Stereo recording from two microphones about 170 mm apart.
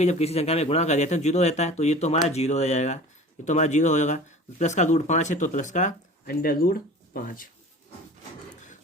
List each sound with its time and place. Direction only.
0.0 s speech: 40° left (ahead or behind); by 7.4 s 60° left (ahead or behind)